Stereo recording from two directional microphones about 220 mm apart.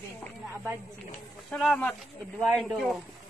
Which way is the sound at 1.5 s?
5° left (ahead or behind).